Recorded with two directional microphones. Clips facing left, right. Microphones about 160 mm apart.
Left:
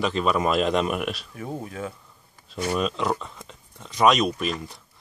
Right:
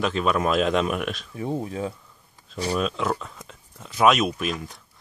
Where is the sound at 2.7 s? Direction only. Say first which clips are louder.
Even; centre (ahead or behind).